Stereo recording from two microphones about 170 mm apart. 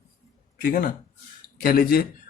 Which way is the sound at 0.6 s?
55° left (ahead or behind).